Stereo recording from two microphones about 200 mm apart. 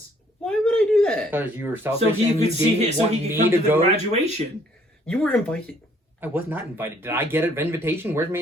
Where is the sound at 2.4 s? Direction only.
35° right (ahead or behind).